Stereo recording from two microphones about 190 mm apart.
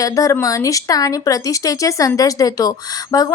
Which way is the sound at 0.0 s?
15° left (ahead or behind).